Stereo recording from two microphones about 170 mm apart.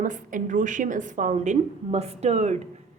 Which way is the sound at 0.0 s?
50° right (ahead or behind).